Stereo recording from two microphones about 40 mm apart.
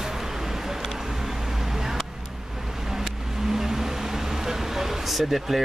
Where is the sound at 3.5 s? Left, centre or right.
Centre.